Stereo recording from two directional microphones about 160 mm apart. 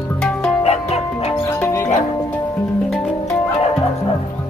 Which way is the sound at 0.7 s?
40° left (ahead or behind).